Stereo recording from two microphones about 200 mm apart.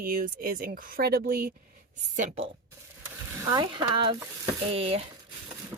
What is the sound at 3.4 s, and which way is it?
Speech, 20° right (ahead or behind).